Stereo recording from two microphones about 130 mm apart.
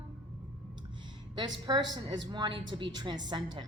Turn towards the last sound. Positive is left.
turn(degrees=-35)  # may be behind; listen again after turning